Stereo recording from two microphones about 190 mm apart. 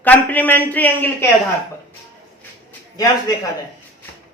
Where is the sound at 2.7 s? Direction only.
20° left (ahead or behind).